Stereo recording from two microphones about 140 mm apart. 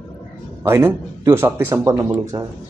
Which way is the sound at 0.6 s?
20° right (ahead or behind).